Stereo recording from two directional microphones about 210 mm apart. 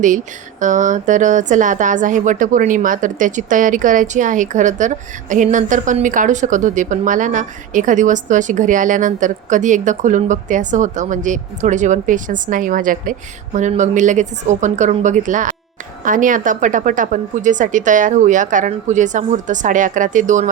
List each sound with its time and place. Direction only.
0.6 s speech: 35° right (ahead or behind)